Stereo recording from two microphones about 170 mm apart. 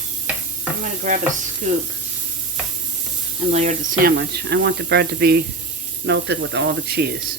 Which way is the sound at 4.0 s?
70° right (ahead or behind).